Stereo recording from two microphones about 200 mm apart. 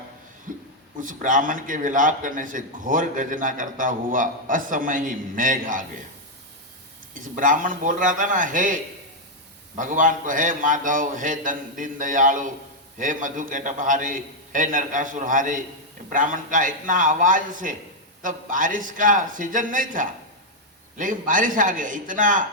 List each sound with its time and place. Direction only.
0.9 s a man's voice: 40° right (ahead or behind)
7.1 s a man's voice: 40° right (ahead or behind)